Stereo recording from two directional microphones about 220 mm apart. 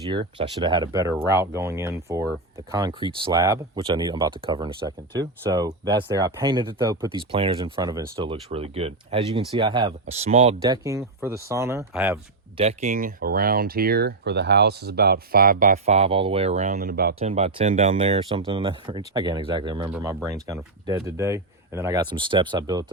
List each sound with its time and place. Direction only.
0.1 s speech: 20° right (ahead or behind)
10.6 s speech: 15° right (ahead or behind)
12.5 s speech: 30° right (ahead or behind)
17.2 s speech: 30° right (ahead or behind)